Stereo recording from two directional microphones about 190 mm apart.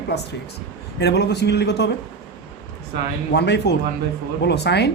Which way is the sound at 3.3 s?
65° left (ahead or behind).